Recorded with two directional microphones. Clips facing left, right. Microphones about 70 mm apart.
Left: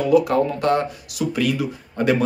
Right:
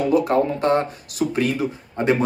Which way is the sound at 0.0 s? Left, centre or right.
Right.